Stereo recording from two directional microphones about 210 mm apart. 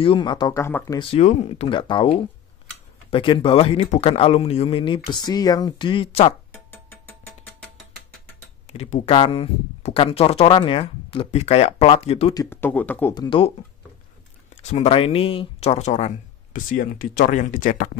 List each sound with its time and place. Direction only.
0.0 s speech: 25° left (ahead or behind)
0.9 s speech: 30° left (ahead or behind)
6.5 s music: 10° left (ahead or behind)
8.6 s speech: 30° left (ahead or behind)
12.4 s speech: 10° left (ahead or behind)
13.1 s speech: 20° left (ahead or behind)
14.5 s speech: 35° left (ahead or behind)